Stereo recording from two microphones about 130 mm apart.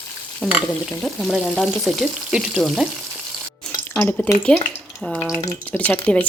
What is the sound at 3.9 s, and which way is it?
Stir, 10° left (ahead or behind).